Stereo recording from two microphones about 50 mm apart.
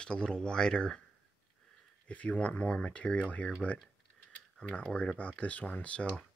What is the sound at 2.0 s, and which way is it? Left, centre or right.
Speech, left.